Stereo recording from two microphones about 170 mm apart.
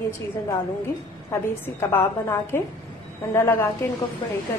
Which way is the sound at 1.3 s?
15° left (ahead or behind).